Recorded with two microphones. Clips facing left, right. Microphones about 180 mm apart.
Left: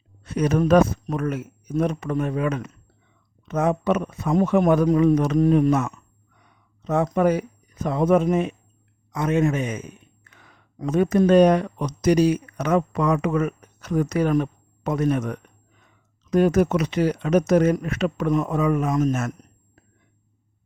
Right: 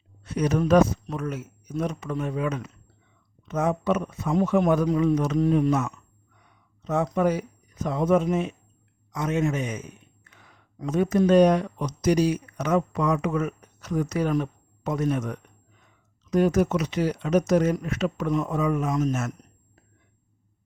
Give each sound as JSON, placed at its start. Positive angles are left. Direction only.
{"t": 0.3, "sound": "a man's voice", "side_deg": 55}